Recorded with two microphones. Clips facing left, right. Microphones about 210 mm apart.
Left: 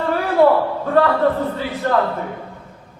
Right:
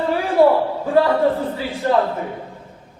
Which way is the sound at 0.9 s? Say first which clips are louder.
Even; 15° right (ahead or behind).